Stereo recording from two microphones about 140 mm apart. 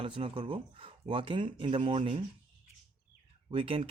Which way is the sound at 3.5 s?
40° right (ahead or behind).